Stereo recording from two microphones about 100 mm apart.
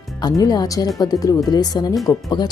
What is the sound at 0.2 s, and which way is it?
Speech, 40° left (ahead or behind).